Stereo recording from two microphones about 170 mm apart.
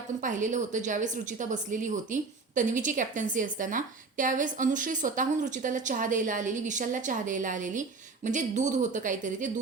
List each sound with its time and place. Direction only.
0.2 s a woman's voice: 50° right (ahead or behind)